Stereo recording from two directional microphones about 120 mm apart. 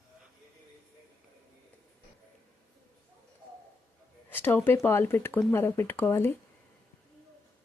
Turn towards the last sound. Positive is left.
turn(degrees=20)  # may be behind; listen again after turning